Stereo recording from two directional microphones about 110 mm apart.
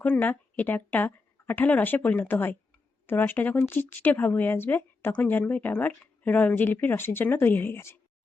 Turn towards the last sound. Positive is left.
turn(degrees=20)  # may be behind; listen again after turning